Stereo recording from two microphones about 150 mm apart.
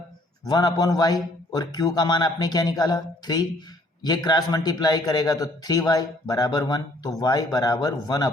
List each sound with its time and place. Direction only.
0.4 s a man's voice: 25° left (ahead or behind)